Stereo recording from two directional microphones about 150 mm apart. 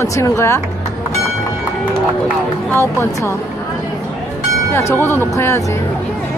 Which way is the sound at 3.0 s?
20° left (ahead or behind).